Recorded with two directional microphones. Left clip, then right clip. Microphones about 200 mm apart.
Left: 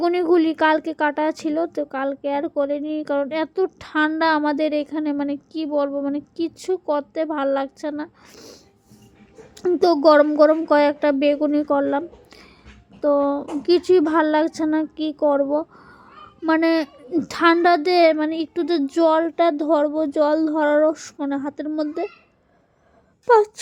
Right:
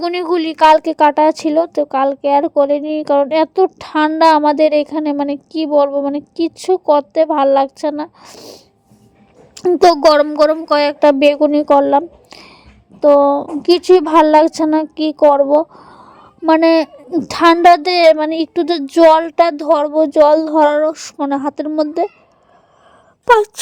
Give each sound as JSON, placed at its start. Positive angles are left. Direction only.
{"t": 0.0, "sound": "a child's voice", "side_deg": -20}
{"t": 23.2, "sound": "speech", "side_deg": -30}